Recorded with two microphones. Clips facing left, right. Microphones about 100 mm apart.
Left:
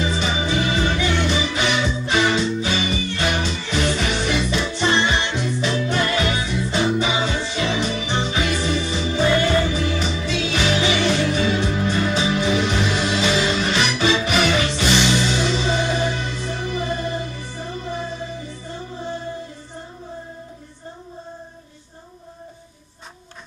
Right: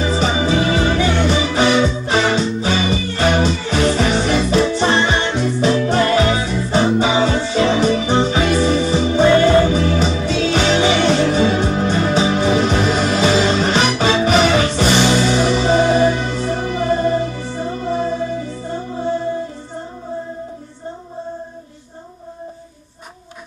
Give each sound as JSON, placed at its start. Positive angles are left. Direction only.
{"t": 0.0, "sound": "music", "side_deg": -35}
{"t": 1.3, "sound": "music", "side_deg": -30}